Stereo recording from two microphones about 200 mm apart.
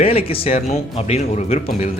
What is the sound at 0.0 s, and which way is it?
Speech, 30° left (ahead or behind).